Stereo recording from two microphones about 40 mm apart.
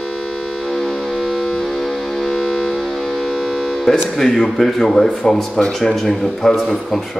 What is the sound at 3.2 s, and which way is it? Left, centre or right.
Civil defense siren, centre.